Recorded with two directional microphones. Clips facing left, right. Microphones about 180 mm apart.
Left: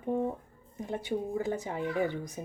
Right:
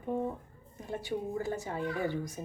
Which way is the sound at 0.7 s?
20° left (ahead or behind).